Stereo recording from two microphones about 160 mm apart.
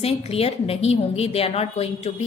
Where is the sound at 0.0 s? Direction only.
40° left (ahead or behind).